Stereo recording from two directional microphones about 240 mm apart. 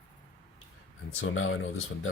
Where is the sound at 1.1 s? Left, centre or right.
Left.